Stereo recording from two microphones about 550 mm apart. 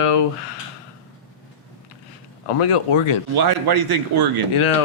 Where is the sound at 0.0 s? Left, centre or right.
Left.